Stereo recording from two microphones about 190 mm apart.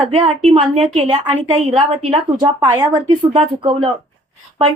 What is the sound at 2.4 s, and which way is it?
A woman's voice, 20° right (ahead or behind).